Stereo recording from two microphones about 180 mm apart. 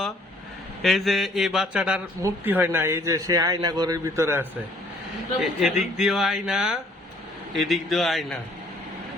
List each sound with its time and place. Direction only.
0.8 s a man's voice: centre (ahead or behind)
5.4 s a man's voice: centre (ahead or behind)